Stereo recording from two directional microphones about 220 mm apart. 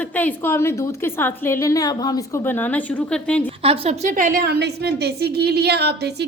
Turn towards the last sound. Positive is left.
turn(degrees=-50)  # may be behind; listen again after turning